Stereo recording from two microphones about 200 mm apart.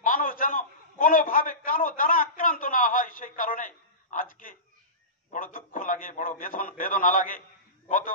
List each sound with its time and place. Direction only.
0.0 s a man's voice: 45° left (ahead or behind)